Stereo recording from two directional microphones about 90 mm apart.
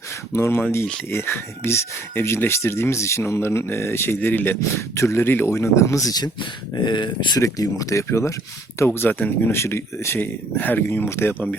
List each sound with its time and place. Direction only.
0.3 s speech: 30° left (ahead or behind); by 7.3 s 60° left (ahead or behind)
7.3 s speech: 40° left (ahead or behind)
8.9 s speech: 20° left (ahead or behind)
9.6 s speech: 30° left (ahead or behind)